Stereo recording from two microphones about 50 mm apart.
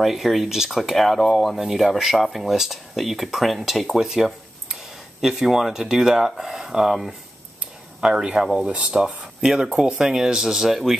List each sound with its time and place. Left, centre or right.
0.0 s speech: centre
8.5 s speech: right; by 11.0 s centre